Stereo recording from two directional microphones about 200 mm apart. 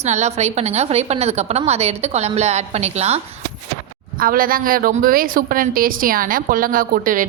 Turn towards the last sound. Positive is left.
turn(degrees=-40)  # may be behind; listen again after turning